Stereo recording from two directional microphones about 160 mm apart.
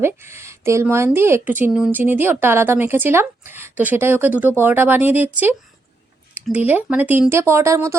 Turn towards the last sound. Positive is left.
turn(degrees=-15)  # may be behind; listen again after turning